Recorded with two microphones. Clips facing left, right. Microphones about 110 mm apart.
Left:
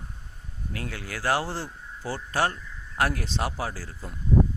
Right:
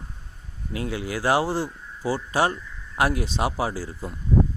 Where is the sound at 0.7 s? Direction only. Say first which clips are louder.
Right 7 dB; 15° right (ahead or behind).